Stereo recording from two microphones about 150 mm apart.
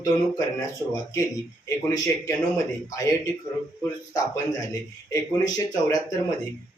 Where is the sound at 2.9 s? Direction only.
20° left (ahead or behind).